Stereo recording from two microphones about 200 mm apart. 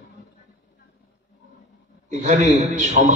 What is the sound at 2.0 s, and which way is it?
Speech, 35° right (ahead or behind).